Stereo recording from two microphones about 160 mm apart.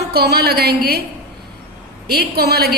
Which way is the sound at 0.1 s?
80° right.